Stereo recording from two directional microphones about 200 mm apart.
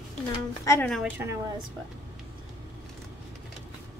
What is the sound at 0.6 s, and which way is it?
Speech, 15° left (ahead or behind).